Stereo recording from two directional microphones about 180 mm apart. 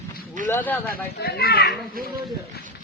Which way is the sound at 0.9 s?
60° left (ahead or behind).